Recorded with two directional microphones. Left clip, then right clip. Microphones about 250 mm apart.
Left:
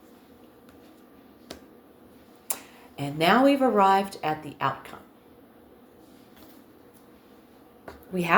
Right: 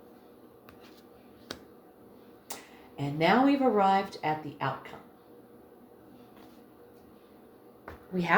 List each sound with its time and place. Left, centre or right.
1.5 s finger snapping: centre
2.5 s speech: left
8.1 s speech: left